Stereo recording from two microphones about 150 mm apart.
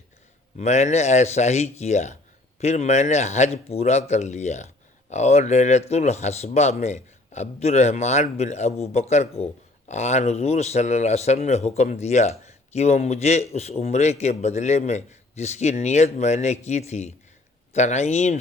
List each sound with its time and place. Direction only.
0.6 s speech: 50° left (ahead or behind)